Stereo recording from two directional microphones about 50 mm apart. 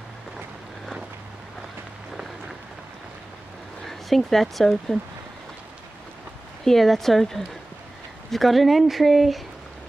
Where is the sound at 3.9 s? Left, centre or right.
Centre.